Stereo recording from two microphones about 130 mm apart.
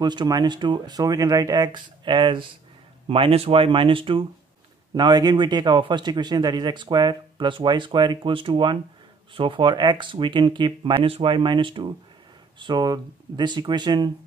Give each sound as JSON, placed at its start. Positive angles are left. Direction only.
{"t": 0.0, "sound": "a man's voice", "side_deg": -35}